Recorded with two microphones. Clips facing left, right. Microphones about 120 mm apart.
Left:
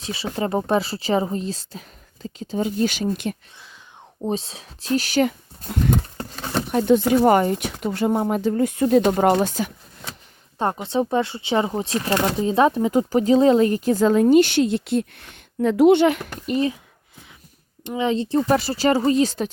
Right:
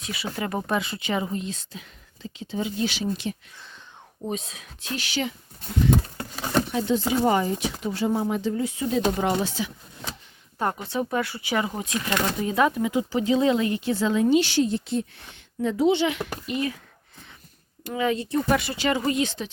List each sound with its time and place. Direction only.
0.0 s speech: 30° left (ahead or behind); by 3.3 s 55° left (ahead or behind)
4.2 s speech: 30° left (ahead or behind)
6.3 s a sound: 5° right (ahead or behind)
6.7 s speech: 55° left (ahead or behind)
10.8 s speech: 25° left (ahead or behind)
12.9 s a woman's voice: 45° left (ahead or behind)
14.6 s a woman's voice: 70° left (ahead or behind); by 16.6 s 45° left (ahead or behind)
17.8 s speech: 25° left (ahead or behind); by 19.5 s 40° left (ahead or behind)